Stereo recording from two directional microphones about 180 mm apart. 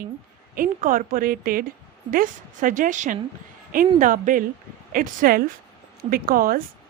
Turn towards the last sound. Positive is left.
turn(degrees=-55)  # may be behind; listen again after turning